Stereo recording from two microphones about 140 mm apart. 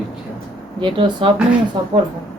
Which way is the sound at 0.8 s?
35° right (ahead or behind).